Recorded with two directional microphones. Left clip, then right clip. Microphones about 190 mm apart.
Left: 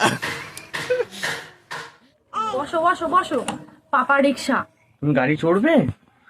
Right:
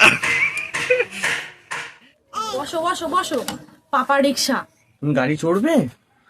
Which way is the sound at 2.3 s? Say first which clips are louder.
Left 1 dB; 20° right (ahead or behind).